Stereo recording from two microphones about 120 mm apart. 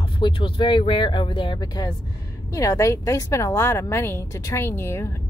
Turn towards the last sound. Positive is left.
turn(degrees=20)  # may be behind; listen again after turning